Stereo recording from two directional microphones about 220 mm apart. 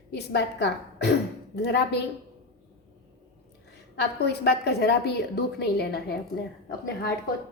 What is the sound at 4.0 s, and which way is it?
A woman's voice, 50° left (ahead or behind).